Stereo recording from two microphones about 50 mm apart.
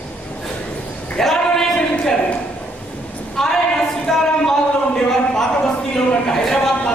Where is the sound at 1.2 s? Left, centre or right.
Centre.